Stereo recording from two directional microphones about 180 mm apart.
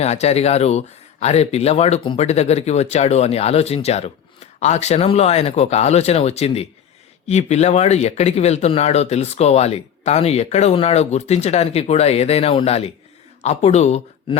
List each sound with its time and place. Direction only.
0.0 s speech: 35° left (ahead or behind)